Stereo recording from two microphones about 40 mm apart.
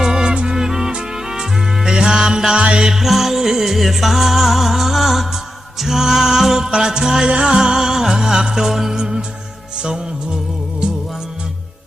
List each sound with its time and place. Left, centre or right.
0.0 s music: centre
2.6 s music: right
2.8 s music: centre